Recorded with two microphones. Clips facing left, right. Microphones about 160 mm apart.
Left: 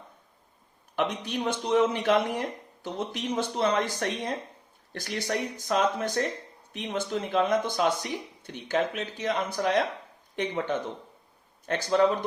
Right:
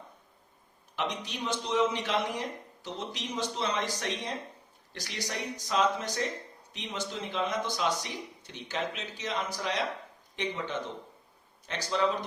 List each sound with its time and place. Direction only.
0.9 s speech: 55° left (ahead or behind)